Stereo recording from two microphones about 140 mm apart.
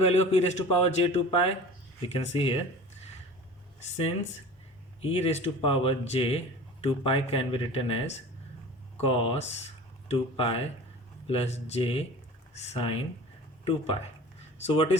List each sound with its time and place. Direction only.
0.0 s speech: 50° left (ahead or behind)
5.0 s speech: 40° left (ahead or behind)